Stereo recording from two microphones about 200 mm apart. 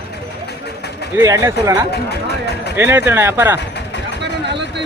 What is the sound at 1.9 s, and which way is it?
Speech, 55° left (ahead or behind).